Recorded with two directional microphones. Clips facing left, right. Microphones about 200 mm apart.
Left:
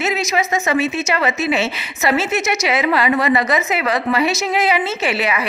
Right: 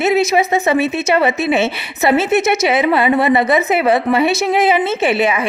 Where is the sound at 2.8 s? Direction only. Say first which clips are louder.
Right 1 dB; 25° right (ahead or behind).